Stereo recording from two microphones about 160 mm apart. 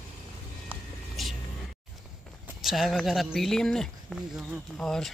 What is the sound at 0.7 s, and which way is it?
Vehicle, centre (ahead or behind).